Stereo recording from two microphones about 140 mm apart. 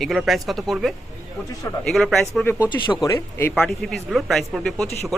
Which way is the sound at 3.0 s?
20° left (ahead or behind).